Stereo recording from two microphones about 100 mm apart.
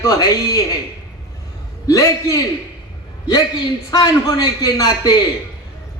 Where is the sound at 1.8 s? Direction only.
35° left (ahead or behind).